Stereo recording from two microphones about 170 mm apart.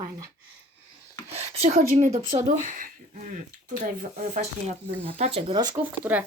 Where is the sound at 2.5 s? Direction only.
50° right (ahead or behind); by 5.7 s 30° right (ahead or behind).